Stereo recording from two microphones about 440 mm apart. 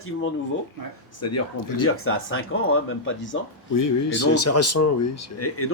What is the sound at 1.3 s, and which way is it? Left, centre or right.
Speech, left.